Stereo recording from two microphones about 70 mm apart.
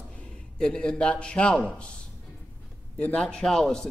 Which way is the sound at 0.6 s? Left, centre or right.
Centre.